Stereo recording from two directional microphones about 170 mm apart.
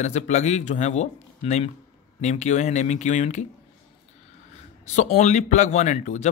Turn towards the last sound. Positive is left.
turn(degrees=45)  # may be behind; listen again after turning